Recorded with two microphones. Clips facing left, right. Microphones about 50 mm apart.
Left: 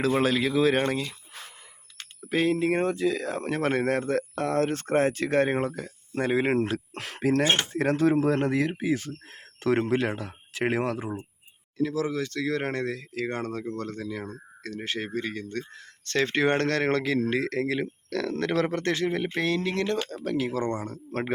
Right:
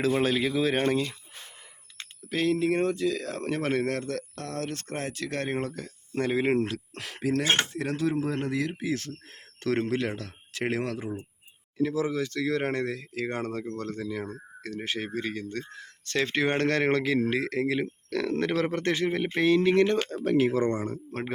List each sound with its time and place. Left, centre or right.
0.1 s speech: centre
2.2 s speech: centre
2.8 s speech: centre
3.8 s speech: centre
6.7 s speech: left
8.8 s speech: centre
11.8 s speech: centre
13.6 s speech: centre
16.6 s speech: centre
21.1 s speech: centre